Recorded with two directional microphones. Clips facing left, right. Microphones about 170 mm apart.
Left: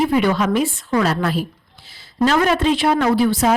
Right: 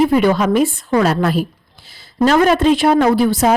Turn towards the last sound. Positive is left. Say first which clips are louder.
# right 3 dB
turn(degrees=-45)  # may be behind; listen again after turning